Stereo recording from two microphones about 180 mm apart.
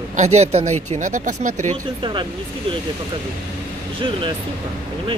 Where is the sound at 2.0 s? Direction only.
25° right (ahead or behind).